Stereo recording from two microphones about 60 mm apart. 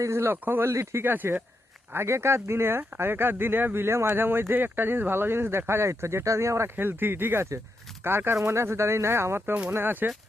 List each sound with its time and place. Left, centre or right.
0.0 s speech: right
0.4 s speech: right
0.7 s speech: right
1.0 s speech: right
6.7 s speech: right